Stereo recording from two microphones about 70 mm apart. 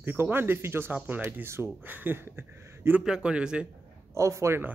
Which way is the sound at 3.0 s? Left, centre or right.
Centre.